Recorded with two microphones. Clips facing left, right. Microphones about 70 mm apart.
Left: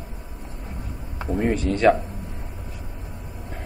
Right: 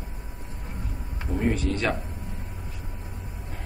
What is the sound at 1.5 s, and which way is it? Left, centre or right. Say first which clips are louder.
Speech: left 8 dB; centre.